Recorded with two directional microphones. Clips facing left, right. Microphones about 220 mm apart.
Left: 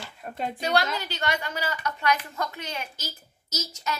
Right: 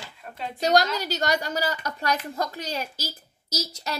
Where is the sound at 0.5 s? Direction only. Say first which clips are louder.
Right 5 dB; 40° right (ahead or behind).